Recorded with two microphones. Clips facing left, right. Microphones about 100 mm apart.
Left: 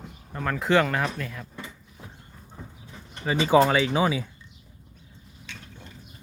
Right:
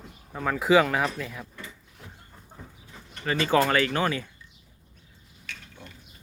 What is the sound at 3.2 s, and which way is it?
Speech, 15° left (ahead or behind).